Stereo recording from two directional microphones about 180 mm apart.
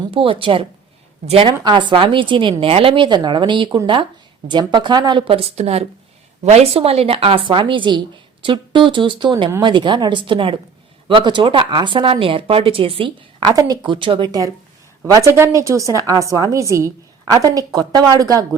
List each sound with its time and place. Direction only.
0.1 s a woman's voice: 30° right (ahead or behind)